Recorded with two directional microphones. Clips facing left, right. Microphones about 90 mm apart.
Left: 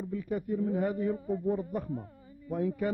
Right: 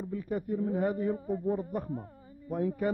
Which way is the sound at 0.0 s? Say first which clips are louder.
Even; 35° right (ahead or behind).